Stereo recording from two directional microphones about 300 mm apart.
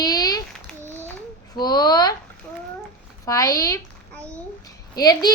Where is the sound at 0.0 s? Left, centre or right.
Centre.